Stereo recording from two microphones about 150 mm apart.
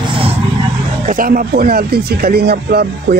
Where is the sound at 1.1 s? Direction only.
70° right (ahead or behind); by 2.8 s 90° right.